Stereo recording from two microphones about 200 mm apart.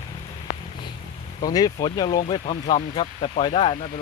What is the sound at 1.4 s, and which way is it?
Speech, 20° left (ahead or behind).